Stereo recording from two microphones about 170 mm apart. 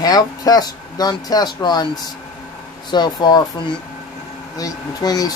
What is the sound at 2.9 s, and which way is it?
Speech, 25° left (ahead or behind).